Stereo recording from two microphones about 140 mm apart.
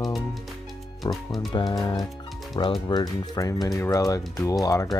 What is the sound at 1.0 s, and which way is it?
Speech, 30° left (ahead or behind).